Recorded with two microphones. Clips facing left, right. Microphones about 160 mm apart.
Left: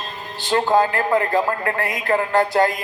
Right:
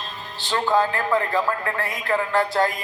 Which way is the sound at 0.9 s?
50° left (ahead or behind).